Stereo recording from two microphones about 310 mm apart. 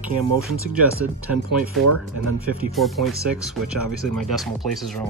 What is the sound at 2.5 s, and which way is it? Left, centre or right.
Speech, centre.